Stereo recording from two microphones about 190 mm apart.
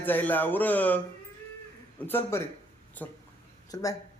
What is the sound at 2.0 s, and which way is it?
Speech, 10° left (ahead or behind).